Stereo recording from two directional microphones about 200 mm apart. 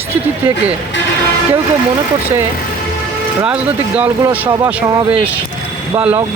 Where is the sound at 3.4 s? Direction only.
5° right (ahead or behind).